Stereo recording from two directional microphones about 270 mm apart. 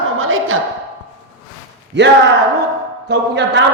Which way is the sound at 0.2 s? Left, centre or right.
Right.